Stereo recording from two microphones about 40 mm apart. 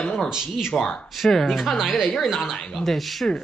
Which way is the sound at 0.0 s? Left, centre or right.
Centre.